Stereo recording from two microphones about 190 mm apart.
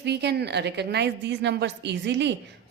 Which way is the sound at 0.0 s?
60° right (ahead or behind).